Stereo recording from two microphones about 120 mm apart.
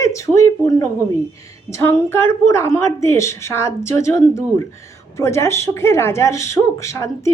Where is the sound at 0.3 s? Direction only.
25° left (ahead or behind).